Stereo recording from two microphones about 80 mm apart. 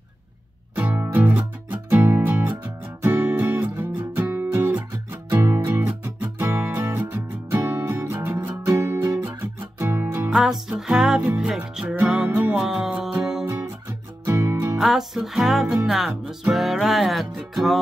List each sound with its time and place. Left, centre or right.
0.7 s music: right
8.0 s music: right
10.3 s music: centre
13.8 s music: right
14.8 s music: centre